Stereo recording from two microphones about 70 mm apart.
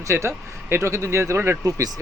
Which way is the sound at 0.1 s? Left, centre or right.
Right.